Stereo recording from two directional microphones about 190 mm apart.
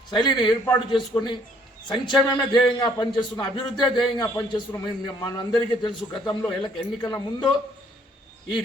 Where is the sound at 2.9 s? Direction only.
25° left (ahead or behind).